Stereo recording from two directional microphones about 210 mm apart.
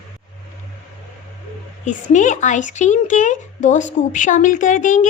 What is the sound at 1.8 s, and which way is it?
Speech, 35° left (ahead or behind).